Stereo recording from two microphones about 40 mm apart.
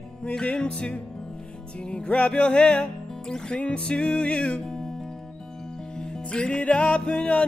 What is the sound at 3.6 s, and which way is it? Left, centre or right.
Music, left.